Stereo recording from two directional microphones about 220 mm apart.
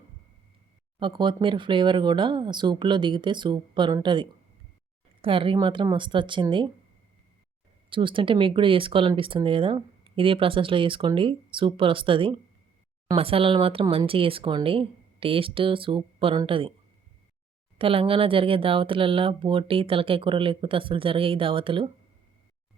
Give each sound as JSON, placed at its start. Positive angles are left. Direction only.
{"t": 0.9, "sound": "speech", "side_deg": -20}
{"t": 7.9, "sound": "speech", "side_deg": -20}
{"t": 17.7, "sound": "speech", "side_deg": -25}